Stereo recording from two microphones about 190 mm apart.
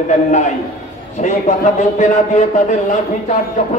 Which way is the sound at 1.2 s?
40° left (ahead or behind).